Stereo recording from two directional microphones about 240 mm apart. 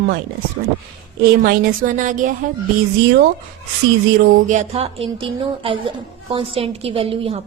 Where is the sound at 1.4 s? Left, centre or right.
Right.